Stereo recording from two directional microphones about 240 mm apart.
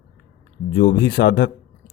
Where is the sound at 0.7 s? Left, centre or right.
Left.